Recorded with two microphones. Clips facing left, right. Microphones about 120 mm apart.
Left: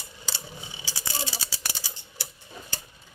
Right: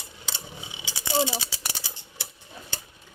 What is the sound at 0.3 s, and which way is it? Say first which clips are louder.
Mechanisms: even; 20° right (ahead or behind).